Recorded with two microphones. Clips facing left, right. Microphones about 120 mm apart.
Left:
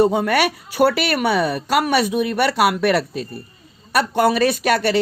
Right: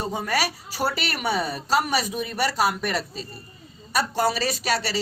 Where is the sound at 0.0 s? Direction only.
65° left (ahead or behind).